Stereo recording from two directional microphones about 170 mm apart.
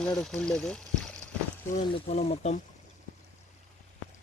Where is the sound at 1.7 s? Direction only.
40° left (ahead or behind).